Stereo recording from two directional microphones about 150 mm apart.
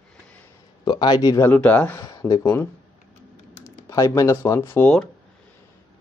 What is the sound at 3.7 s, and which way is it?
Speech, 20° left (ahead or behind).